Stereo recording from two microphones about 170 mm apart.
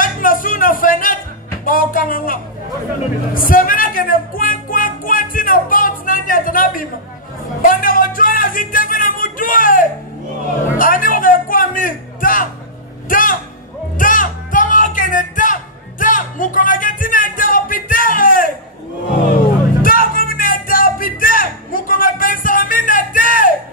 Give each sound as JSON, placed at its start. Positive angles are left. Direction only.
{"t": 0.0, "sound": "music", "side_deg": 55}
{"t": 7.6, "sound": "a sound", "side_deg": 55}
{"t": 10.8, "sound": "music", "side_deg": 55}
{"t": 19.8, "sound": "music", "side_deg": 55}